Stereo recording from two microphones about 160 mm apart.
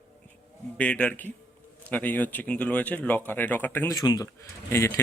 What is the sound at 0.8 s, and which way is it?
Speech, 10° left (ahead or behind).